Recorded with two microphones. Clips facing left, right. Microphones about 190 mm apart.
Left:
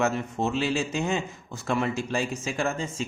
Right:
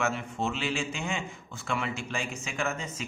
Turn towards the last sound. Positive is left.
turn(degrees=30)  # may be behind; listen again after turning